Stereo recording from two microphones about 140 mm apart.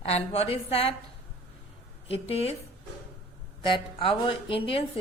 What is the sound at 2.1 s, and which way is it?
Speech, 45° left (ahead or behind).